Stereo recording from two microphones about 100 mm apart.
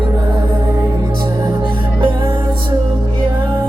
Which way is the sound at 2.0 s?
55° right (ahead or behind).